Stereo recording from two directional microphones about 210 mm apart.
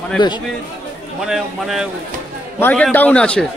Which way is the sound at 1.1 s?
Centre (ahead or behind).